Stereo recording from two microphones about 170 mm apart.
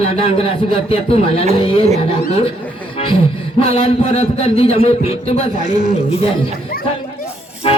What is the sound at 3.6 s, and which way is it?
A man's voice, 35° left (ahead or behind).